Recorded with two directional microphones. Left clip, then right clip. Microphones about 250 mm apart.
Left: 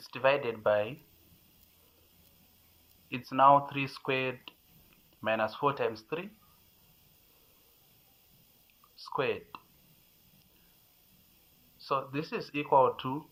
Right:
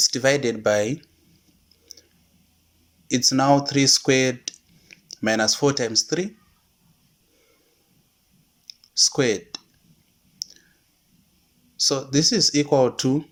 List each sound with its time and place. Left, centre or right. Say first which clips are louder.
0.0 s speech: right 9 dB; right
3.1 s speech: right 4 dB; right
9.0 s speech: right 6 dB; right
11.8 s speech: right 12 dB; right